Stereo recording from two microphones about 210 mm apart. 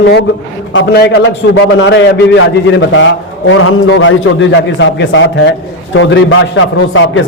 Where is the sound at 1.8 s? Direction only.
60° left (ahead or behind).